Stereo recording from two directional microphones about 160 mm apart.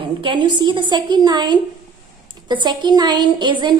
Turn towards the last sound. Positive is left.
turn(degrees=-30)  # may be behind; listen again after turning